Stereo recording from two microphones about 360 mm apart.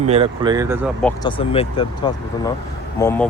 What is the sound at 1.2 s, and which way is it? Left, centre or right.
Speech, centre.